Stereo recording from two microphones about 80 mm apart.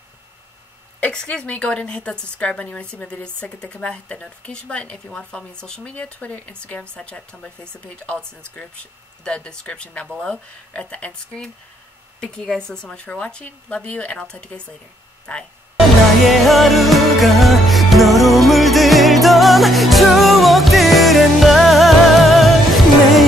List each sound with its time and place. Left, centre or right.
1.0 s a woman's voice: centre
16.3 s music: centre